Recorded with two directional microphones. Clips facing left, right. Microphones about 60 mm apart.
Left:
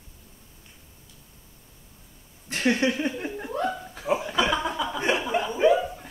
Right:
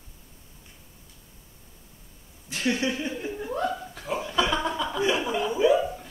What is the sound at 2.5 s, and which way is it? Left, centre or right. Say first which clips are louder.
Speech: left 3 dB; left.